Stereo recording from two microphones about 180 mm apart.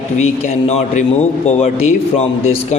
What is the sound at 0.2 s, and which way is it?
A man's voice, 40° left (ahead or behind).